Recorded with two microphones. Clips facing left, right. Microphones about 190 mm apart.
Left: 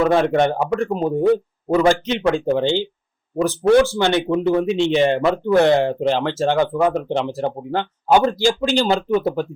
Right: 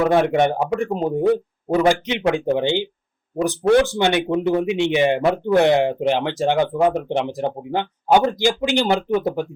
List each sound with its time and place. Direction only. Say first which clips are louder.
0.0 s speech: left 1 dB; 15° right (ahead or behind)